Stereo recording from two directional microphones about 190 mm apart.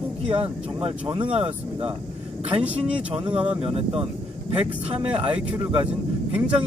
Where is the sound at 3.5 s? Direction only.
30° right (ahead or behind).